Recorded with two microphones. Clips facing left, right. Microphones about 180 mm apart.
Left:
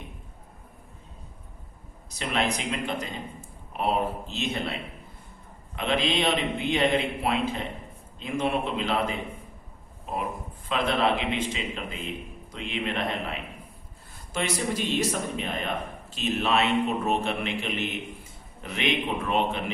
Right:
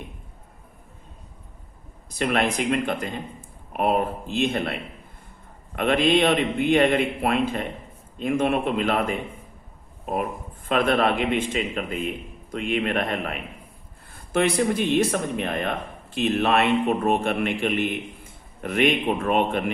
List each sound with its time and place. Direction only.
2.0 s a man's voice: 55° right (ahead or behind)
10.7 s a man's voice: 50° right (ahead or behind)